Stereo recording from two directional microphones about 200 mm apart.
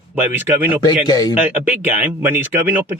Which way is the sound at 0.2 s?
10° right (ahead or behind).